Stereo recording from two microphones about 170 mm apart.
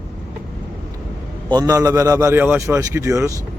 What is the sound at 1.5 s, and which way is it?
A man's voice, 20° right (ahead or behind).